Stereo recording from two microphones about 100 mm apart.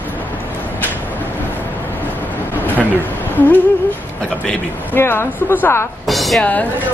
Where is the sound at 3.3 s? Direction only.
20° left (ahead or behind).